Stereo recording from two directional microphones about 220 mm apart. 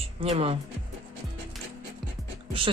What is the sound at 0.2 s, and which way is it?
Speech, 25° right (ahead or behind).